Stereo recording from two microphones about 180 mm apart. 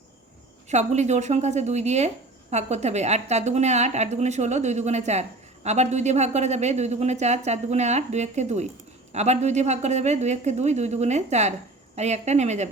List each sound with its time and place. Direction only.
0.7 s a woman's voice: 40° right (ahead or behind)